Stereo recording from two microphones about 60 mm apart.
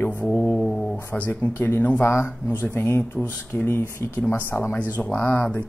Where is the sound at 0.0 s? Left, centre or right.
Left.